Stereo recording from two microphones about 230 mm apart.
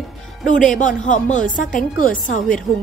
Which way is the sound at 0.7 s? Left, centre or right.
Left.